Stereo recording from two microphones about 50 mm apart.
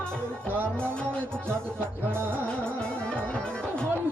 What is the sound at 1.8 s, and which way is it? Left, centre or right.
Music, right.